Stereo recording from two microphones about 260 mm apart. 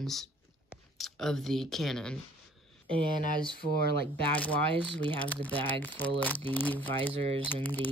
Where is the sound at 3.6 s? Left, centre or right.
Right.